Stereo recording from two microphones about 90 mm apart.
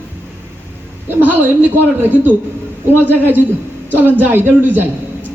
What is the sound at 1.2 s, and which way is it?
Speech, 20° right (ahead or behind).